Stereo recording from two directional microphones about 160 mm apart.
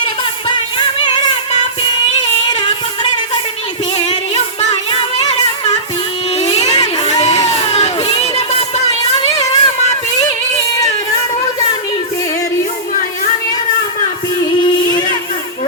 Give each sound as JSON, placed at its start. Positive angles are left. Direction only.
{"t": 0.0, "sound": "music", "side_deg": 30}
{"t": 3.9, "sound": "music", "side_deg": 40}
{"t": 6.3, "sound": "baby cry", "side_deg": 40}
{"t": 9.4, "sound": "a sound", "side_deg": 45}